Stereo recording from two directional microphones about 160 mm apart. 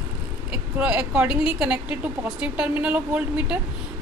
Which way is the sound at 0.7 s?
10° right (ahead or behind).